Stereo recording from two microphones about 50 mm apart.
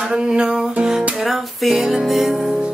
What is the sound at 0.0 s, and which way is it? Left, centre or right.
Music, centre.